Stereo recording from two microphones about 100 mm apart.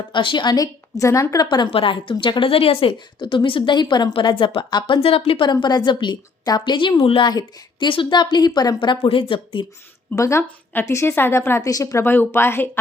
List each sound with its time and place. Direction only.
0.1 s a woman's voice: 55° left (ahead or behind); by 1.5 s 35° left (ahead or behind)
1.5 s a woman's voice: 55° left (ahead or behind); by 2.9 s 70° left (ahead or behind)
3.2 s a woman's voice: 55° left (ahead or behind)
5.0 s speech: 70° left (ahead or behind)
5.6 s a woman's voice: 45° left (ahead or behind)
7.0 s a woman's voice: 60° left (ahead or behind)
7.3 s a woman's voice: 45° left (ahead or behind)
9.0 s a woman's voice: 65° left (ahead or behind)
10.2 s a woman's voice: 30° left (ahead or behind)